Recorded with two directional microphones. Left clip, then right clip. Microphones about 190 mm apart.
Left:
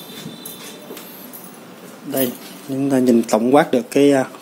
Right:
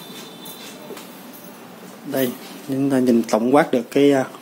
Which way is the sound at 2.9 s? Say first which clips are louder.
Left 3 dB; 10° left (ahead or behind).